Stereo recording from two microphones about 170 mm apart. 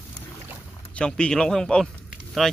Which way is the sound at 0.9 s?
5° left (ahead or behind).